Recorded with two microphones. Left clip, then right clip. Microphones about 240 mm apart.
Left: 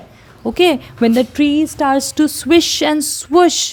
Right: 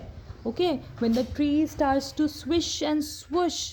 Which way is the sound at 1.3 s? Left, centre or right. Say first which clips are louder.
Left 10 dB; left.